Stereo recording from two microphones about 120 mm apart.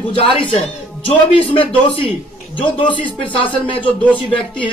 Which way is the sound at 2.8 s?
45° left (ahead or behind).